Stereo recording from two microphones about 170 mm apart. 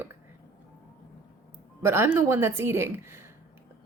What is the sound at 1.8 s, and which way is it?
Speech, 15° right (ahead or behind).